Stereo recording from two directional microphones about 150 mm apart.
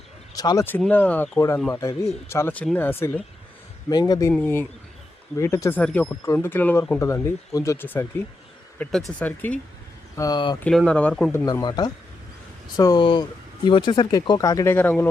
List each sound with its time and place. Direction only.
0.3 s speech: 20° left (ahead or behind)
3.8 s speech: 25° left (ahead or behind)
5.4 s speech: 20° left (ahead or behind)
8.8 s speech: centre (ahead or behind)
10.2 s speech: 25° left (ahead or behind)
10.6 s speech: 5° left (ahead or behind)
11.6 s speech: 30° left (ahead or behind); by 15.1 s 10° left (ahead or behind)